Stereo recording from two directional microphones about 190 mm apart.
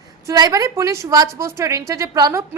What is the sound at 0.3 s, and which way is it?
A woman's voice, 20° right (ahead or behind).